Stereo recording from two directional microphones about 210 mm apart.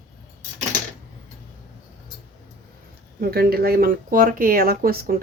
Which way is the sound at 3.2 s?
45° right (ahead or behind).